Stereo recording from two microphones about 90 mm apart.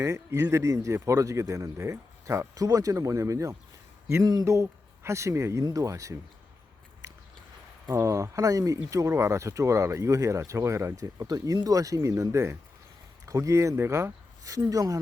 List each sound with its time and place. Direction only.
0.0 s speech: 35° right (ahead or behind)
7.9 s speech: 35° right (ahead or behind)